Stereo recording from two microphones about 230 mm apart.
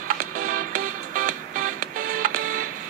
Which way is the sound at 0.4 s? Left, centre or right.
Right.